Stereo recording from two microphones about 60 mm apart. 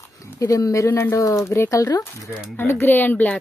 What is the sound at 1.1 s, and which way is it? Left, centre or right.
Speech, left.